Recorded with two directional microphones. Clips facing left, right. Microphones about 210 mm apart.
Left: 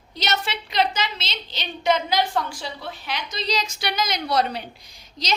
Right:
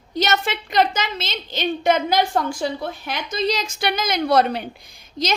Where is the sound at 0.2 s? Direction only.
50° right (ahead or behind).